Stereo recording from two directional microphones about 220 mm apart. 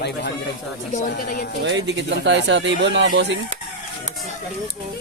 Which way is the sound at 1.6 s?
55° right (ahead or behind).